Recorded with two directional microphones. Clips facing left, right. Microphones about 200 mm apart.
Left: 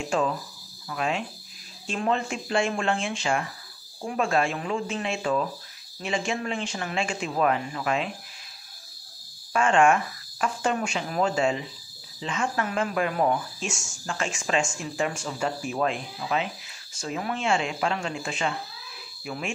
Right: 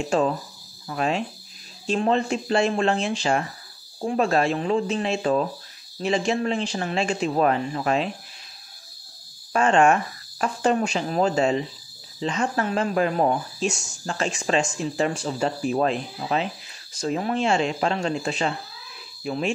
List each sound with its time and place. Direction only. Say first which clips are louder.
0.1 s speech: right 4 dB; 35° right (ahead or behind)
9.5 s speech: right 2 dB; 35° right (ahead or behind)